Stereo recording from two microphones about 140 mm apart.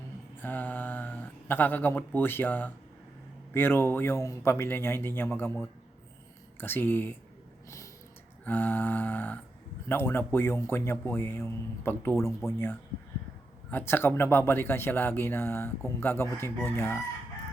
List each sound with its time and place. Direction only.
0.3 s speech: 15° left (ahead or behind)
8.4 s speech: 15° left (ahead or behind)
13.7 s speech: 15° left (ahead or behind)